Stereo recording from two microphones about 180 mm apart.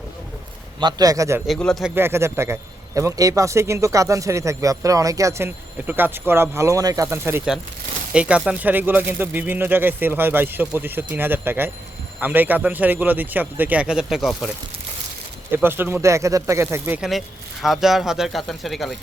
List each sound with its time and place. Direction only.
0.8 s a man's voice: 25° right (ahead or behind)
1.5 s speech: centre (ahead or behind)
2.0 s a man's voice: 15° right (ahead or behind)
15.5 s speech: 10° right (ahead or behind)